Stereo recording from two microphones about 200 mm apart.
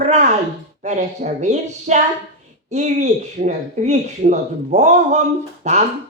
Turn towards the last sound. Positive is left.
turn(degrees=-35)  # may be behind; listen again after turning